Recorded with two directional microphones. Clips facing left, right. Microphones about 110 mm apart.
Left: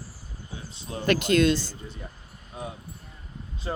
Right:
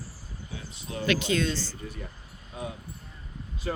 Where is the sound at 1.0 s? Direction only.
50° left (ahead or behind).